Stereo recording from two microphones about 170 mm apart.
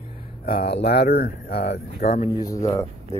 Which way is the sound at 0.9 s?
70° left (ahead or behind).